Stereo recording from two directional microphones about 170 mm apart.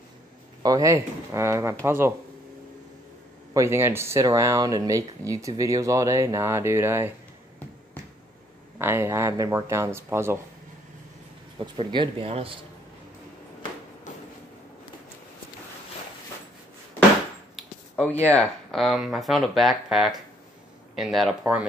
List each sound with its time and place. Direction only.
0.6 s speech: 20° right (ahead or behind)
3.5 s speech: 15° right (ahead or behind)
8.7 s speech: 15° right (ahead or behind)
11.6 s speech: 30° right (ahead or behind)
17.6 s a sound: 5° left (ahead or behind)
18.2 s speech: 10° left (ahead or behind)